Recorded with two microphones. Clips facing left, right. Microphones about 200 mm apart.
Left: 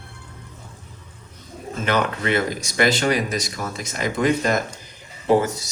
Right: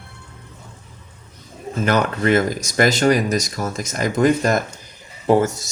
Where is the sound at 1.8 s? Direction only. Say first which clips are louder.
Right 4 dB; 45° right (ahead or behind).